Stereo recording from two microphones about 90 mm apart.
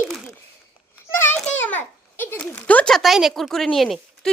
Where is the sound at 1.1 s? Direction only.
25° left (ahead or behind).